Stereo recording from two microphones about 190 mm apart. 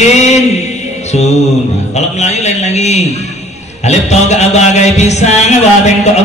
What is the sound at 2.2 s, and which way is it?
A man's voice, 35° left (ahead or behind).